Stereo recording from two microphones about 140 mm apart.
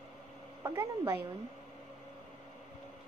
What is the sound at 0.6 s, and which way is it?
Speech, 20° right (ahead or behind).